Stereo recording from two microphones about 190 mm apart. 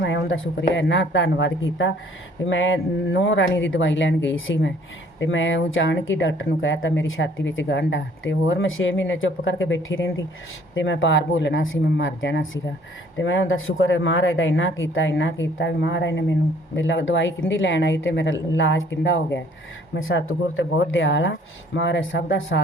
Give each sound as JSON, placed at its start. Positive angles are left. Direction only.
{"t": 0.0, "sound": "a sound", "side_deg": 75}
{"t": 0.7, "sound": "speech", "side_deg": 75}
{"t": 2.5, "sound": "speech", "side_deg": 90}
{"t": 13.1, "sound": "speech", "side_deg": 90}
{"t": 15.5, "sound": "speech", "side_deg": 70}
{"t": 16.7, "sound": "speech", "side_deg": 80}
{"t": 20.0, "sound": "speech", "side_deg": 90}
{"t": 21.8, "sound": "speech", "side_deg": 70}